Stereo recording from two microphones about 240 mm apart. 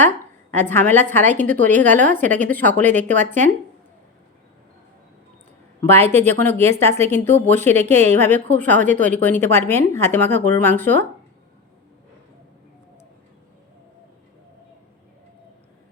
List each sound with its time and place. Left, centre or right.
0.6 s speech: centre
2.8 s speech: right
6.0 s speech: centre
7.8 s speech: right
8.2 s speech: centre